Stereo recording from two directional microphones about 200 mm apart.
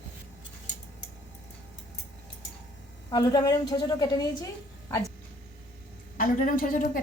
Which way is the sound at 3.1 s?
20° left (ahead or behind).